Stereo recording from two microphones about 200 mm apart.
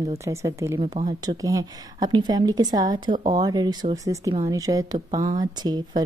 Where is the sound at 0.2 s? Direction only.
15° right (ahead or behind).